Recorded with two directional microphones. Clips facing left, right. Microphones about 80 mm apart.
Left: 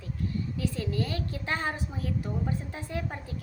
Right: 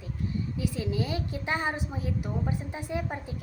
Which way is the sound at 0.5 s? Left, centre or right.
Centre.